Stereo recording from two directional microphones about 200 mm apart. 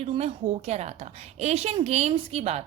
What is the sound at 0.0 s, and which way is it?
A woman's voice, 30° right (ahead or behind).